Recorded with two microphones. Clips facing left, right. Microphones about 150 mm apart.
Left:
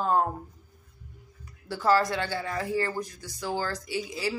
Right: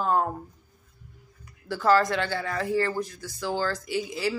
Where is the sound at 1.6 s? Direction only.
15° left (ahead or behind).